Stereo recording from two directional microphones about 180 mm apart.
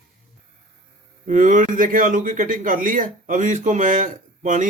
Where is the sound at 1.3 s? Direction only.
45° right (ahead or behind).